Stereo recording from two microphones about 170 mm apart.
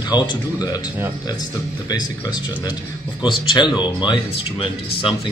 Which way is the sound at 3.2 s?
25° left (ahead or behind).